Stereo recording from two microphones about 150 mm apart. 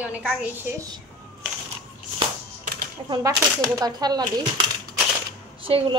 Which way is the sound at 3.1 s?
20° right (ahead or behind).